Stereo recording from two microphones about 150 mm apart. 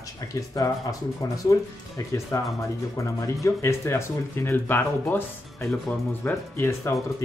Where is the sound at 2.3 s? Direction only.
20° left (ahead or behind).